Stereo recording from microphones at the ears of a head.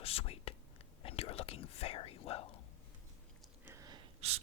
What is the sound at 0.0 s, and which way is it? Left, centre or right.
Whispering, left.